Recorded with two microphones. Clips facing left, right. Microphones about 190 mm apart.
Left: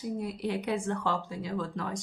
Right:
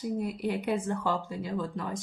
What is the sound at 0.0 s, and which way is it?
Speech, 5° right (ahead or behind).